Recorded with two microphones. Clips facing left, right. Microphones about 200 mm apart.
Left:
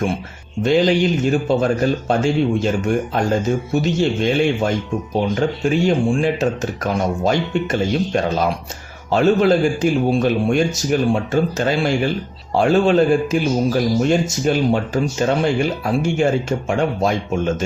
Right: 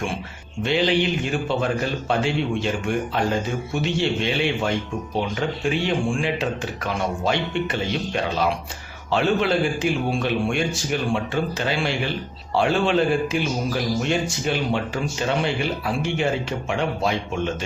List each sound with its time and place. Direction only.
0.6 s speech: 40° left (ahead or behind)